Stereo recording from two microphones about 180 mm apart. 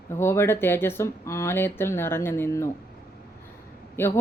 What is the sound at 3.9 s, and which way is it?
Speech, 15° left (ahead or behind).